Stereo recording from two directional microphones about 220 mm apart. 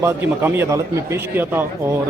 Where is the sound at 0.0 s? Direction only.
10° right (ahead or behind).